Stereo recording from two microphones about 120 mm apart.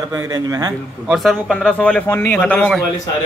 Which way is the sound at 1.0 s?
Centre (ahead or behind).